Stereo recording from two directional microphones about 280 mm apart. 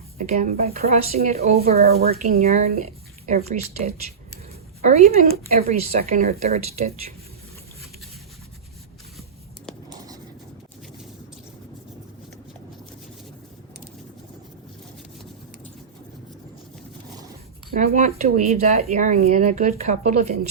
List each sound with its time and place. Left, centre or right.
0.2 s speech: right
17.7 s speech: right